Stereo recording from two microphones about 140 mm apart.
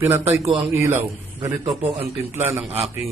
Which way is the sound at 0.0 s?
20° right (ahead or behind).